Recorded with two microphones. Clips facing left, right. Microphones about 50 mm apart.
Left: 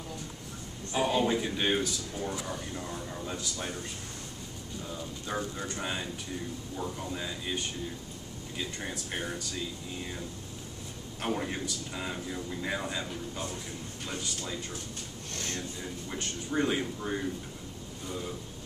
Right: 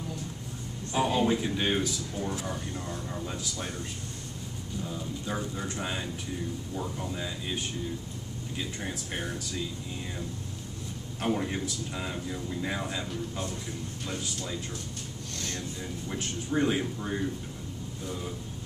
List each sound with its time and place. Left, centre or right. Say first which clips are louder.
0.9 s a man's voice: right 1 dB; centre
5.2 s a man's voice: left 1 dB; centre
8.5 s a man's voice: right 1 dB; centre
11.2 s a man's voice: right 3 dB; centre
14.0 s a man's voice: right 1 dB; centre
15.3 s a sound: even; left
16.1 s a man's voice: right 3 dB; centre